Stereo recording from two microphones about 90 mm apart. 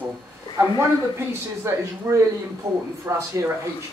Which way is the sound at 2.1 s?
45° right (ahead or behind).